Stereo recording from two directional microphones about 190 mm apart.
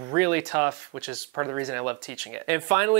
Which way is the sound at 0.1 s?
10° right (ahead or behind).